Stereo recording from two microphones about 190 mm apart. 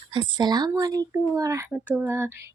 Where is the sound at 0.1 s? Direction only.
25° right (ahead or behind).